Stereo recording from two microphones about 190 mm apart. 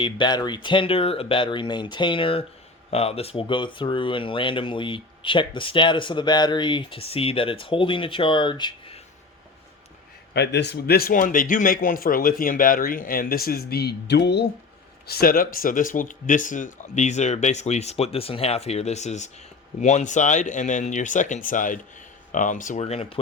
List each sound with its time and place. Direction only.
0.0 s speech: 25° left (ahead or behind)
10.3 s a man's voice: 65° left (ahead or behind); by 23.1 s 30° left (ahead or behind)